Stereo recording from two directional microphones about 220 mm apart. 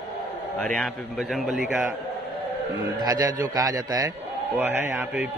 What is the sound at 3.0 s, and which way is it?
A man's voice, 15° right (ahead or behind).